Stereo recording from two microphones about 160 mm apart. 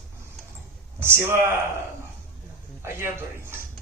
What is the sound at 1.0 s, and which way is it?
Speech, 15° right (ahead or behind).